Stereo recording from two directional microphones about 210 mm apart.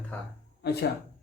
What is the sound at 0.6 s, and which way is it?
Speech, 50° left (ahead or behind).